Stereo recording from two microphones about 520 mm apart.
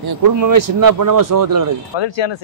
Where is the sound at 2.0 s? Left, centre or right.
Left.